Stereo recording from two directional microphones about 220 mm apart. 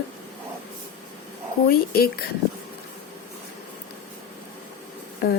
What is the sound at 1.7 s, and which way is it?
Speech, 45° left (ahead or behind).